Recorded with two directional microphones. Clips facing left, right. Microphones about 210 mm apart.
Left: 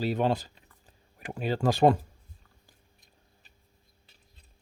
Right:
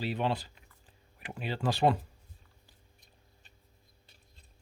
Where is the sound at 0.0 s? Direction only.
45° left (ahead or behind).